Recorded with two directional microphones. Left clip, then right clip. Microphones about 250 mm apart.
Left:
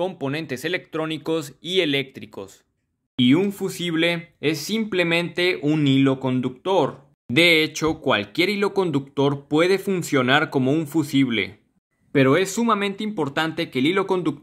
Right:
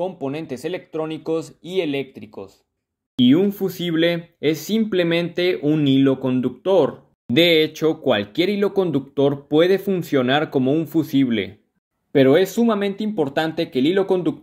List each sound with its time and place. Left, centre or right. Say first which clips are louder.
0.0 s speech: even; left
3.2 s speech: right 3 dB; centre